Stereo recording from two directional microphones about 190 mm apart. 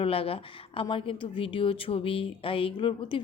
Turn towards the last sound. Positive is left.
turn(degrees=25)  # may be behind; listen again after turning